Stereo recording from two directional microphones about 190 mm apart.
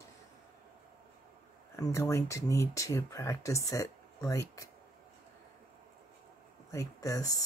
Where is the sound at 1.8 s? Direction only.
15° left (ahead or behind).